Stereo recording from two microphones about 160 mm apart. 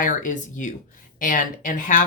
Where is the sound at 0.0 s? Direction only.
55° left (ahead or behind).